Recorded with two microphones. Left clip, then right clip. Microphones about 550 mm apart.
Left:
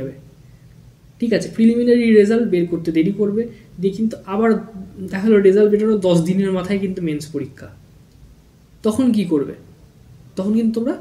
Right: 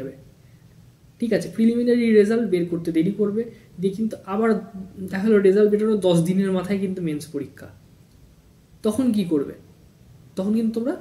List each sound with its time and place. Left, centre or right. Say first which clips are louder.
1.2 s speech: left 4 dB; right
8.8 s speech: left 4 dB; right